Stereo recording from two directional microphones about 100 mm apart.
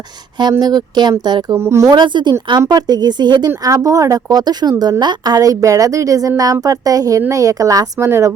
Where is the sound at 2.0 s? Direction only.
50° right (ahead or behind).